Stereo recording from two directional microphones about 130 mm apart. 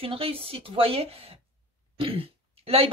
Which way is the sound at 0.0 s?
45° right (ahead or behind).